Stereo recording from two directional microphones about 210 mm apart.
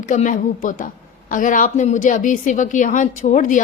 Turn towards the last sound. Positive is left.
turn(degrees=35)  # may be behind; listen again after turning